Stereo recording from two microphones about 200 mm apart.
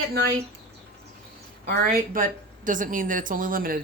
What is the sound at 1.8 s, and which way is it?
A woman's voice, 45° right (ahead or behind).